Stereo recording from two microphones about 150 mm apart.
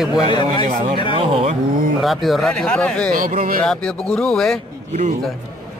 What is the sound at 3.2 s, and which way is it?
Speech, 70° right (ahead or behind).